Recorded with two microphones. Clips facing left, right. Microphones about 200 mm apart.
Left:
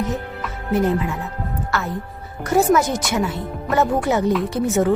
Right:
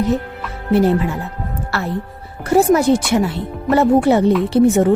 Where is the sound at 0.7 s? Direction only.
35° right (ahead or behind).